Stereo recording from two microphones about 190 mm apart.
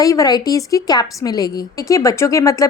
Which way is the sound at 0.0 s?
20° left (ahead or behind).